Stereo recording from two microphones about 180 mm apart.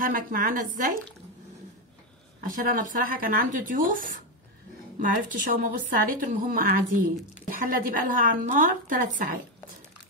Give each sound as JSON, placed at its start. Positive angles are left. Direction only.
{"t": 0.0, "sound": "a woman's voice", "side_deg": -50}
{"t": 2.4, "sound": "a woman's voice", "side_deg": -50}
{"t": 5.3, "sound": "a woman's voice", "side_deg": -50}